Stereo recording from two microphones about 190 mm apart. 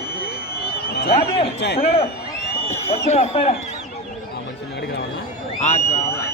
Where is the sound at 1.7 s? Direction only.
30° left (ahead or behind).